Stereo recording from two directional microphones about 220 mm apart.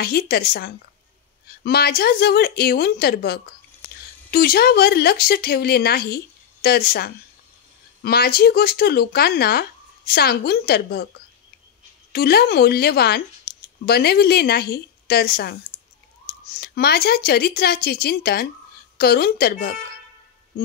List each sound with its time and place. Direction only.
0.0 s speech: 45° left (ahead or behind)
12.1 s speech: 45° left (ahead or behind)
15.7 s clicking: 25° left (ahead or behind)
16.5 s speech: 45° left (ahead or behind)